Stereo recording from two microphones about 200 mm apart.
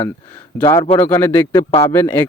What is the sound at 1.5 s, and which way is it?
Speech, 20° left (ahead or behind).